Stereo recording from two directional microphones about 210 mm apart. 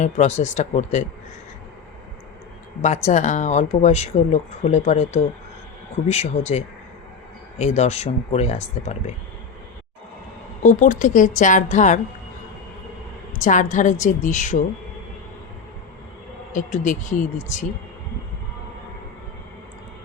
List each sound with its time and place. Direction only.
0.0 s speech: 35° left (ahead or behind)
2.8 s speech: 35° left (ahead or behind)
10.6 s speech: 35° left (ahead or behind)
13.4 s speech: 35° left (ahead or behind)
16.5 s speech: 35° left (ahead or behind)